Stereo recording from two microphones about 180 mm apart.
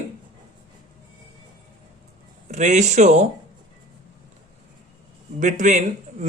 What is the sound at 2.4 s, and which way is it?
Speech, 40° right (ahead or behind).